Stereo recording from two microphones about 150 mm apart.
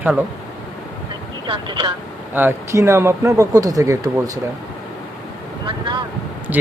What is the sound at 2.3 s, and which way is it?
Speech, 15° right (ahead or behind).